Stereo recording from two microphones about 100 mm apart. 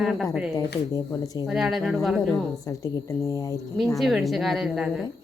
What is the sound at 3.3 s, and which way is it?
Speech, 40° left (ahead or behind).